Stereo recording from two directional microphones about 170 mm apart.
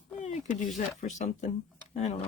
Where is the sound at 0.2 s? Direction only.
45° left (ahead or behind).